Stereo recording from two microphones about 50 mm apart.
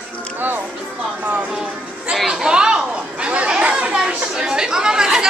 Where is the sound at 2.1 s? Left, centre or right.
Centre.